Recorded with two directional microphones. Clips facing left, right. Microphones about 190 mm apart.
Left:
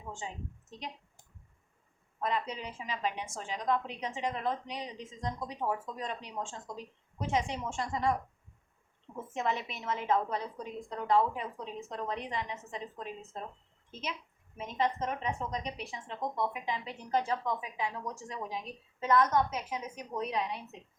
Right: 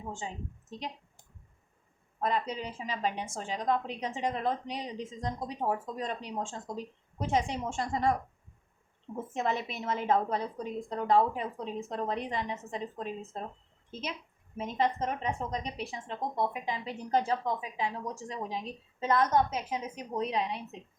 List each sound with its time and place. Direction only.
0.0 s a woman's voice: 30° right (ahead or behind)
2.2 s a woman's voice: 35° right (ahead or behind)
9.3 s a woman's voice: 35° right (ahead or behind)